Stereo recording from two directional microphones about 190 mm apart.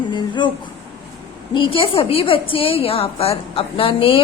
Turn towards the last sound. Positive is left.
turn(degrees=30)  # may be behind; listen again after turning